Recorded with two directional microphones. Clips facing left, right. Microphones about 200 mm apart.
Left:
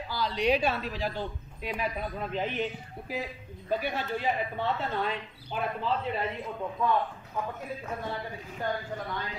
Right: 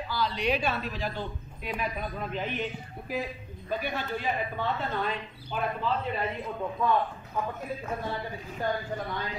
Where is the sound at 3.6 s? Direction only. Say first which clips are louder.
Left 1 dB; 30° left (ahead or behind).